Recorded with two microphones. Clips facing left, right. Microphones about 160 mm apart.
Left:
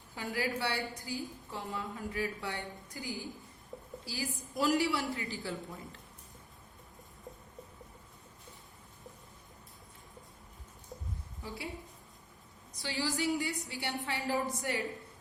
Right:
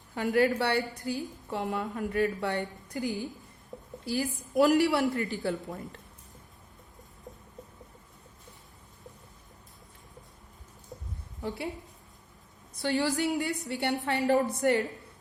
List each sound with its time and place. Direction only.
0.1 s a woman's voice: 60° right (ahead or behind)
11.4 s a woman's voice: 65° right (ahead or behind)
12.7 s a woman's voice: 60° right (ahead or behind)